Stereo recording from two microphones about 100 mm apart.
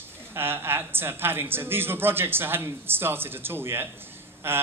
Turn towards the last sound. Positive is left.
turn(degrees=-20)  # may be behind; listen again after turning